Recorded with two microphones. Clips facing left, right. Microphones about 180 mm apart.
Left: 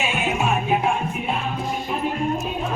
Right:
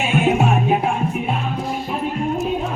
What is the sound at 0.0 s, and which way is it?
Music, 55° right (ahead or behind).